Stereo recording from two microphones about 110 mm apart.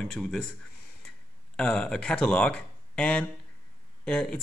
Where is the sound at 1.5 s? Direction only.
10° left (ahead or behind).